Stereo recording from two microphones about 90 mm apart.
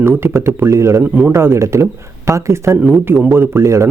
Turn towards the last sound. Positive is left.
turn(degrees=-35)  # may be behind; listen again after turning